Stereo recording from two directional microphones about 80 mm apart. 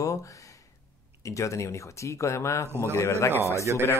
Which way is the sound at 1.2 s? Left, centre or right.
Left.